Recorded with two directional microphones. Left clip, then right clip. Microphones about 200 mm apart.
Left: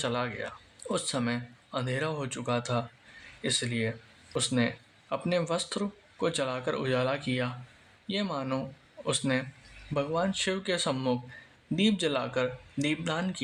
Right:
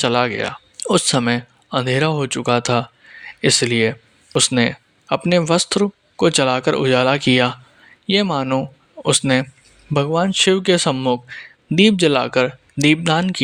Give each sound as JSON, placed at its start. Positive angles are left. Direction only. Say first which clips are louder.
{"t": 0.0, "sound": "speech", "louder": "right 14 dB", "side_deg": -40}